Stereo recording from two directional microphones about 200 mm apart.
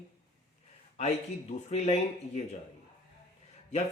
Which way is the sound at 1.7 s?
35° left (ahead or behind).